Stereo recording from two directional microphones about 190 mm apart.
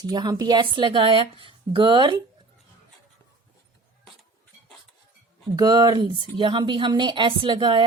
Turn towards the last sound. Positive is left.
turn(degrees=-25)  # may be behind; listen again after turning